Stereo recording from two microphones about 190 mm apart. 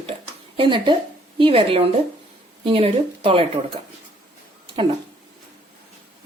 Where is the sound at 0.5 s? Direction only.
25° right (ahead or behind).